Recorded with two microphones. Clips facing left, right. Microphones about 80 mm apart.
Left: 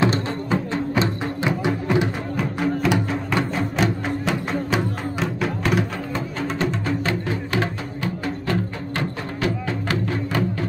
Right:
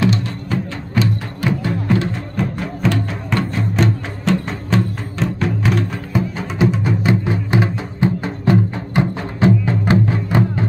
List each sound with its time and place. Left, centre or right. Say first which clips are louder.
0.0 s music: right 2 dB; left
2.3 s music: left 1 dB; centre
6.1 s music: right 6 dB; centre